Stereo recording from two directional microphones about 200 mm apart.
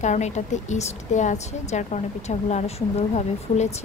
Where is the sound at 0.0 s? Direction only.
35° left (ahead or behind).